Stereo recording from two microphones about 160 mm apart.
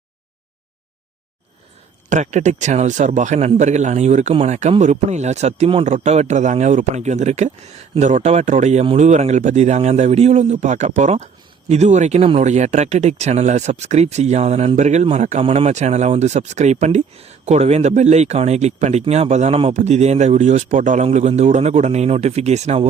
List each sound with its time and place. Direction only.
2.0 s speech: 50° right (ahead or behind)